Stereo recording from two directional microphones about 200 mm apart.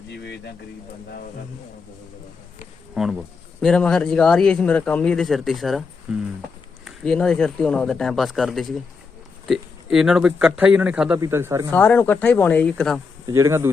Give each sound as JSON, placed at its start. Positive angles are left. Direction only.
{"t": 0.1, "sound": "speech", "side_deg": 60}
{"t": 2.9, "sound": "speech", "side_deg": 0}
{"t": 11.7, "sound": "speech", "side_deg": 10}
{"t": 13.2, "sound": "speech", "side_deg": -15}